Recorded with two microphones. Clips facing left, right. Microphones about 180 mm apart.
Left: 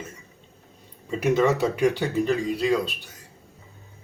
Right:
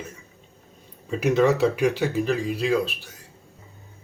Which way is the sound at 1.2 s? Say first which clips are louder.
Right 2 dB; centre (ahead or behind).